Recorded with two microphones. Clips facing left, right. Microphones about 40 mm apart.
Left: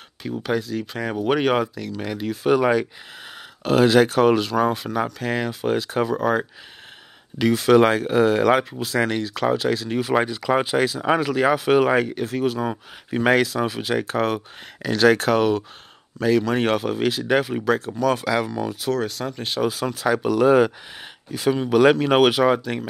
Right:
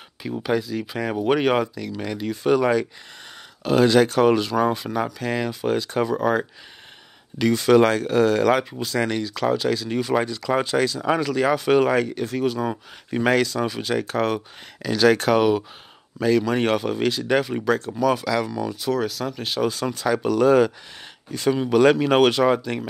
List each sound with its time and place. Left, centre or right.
0.2 s speech: centre
18.2 s speech: centre
18.8 s speech: centre